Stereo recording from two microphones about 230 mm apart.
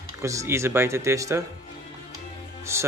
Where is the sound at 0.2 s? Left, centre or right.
Centre.